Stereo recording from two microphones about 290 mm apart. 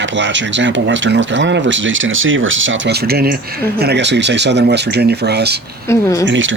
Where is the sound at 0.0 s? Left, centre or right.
Right.